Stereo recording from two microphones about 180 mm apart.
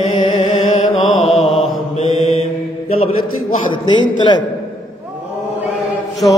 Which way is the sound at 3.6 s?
25° left (ahead or behind).